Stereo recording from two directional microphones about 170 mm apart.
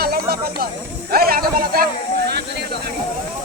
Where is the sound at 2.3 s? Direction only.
75° right (ahead or behind).